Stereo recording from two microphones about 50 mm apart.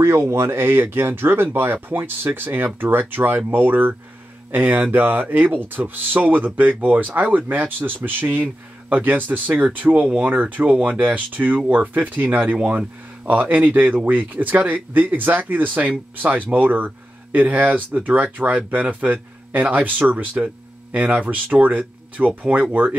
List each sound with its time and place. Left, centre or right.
0.0 s speech: right